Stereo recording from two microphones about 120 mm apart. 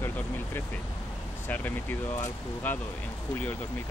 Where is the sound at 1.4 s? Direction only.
15° left (ahead or behind).